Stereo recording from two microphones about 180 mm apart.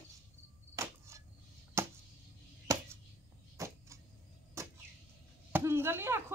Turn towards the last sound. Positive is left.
turn(degrees=-15)  # may be behind; listen again after turning